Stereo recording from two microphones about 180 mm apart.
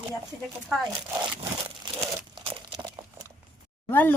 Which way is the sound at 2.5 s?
25° right (ahead or behind).